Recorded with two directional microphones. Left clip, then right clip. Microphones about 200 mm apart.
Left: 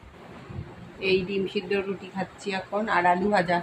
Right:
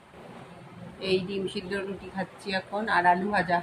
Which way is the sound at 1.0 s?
15° left (ahead or behind).